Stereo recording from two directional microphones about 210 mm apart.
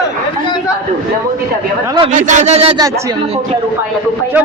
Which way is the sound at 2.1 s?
35° right (ahead or behind).